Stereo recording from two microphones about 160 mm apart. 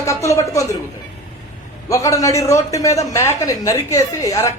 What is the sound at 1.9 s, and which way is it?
Speech, 20° left (ahead or behind).